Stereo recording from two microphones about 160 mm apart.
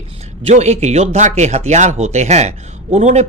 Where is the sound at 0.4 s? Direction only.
45° right (ahead or behind).